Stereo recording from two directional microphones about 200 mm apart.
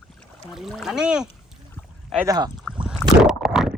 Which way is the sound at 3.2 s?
5° right (ahead or behind).